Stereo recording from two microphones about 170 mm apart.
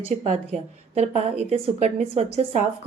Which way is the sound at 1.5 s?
40° right (ahead or behind).